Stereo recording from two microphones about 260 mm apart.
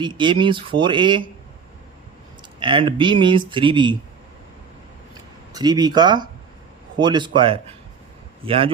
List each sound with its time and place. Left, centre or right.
0.0 s speech: centre
2.6 s speech: centre
5.5 s speech: centre